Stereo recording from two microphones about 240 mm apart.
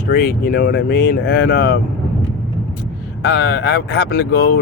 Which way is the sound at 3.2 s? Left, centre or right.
Left.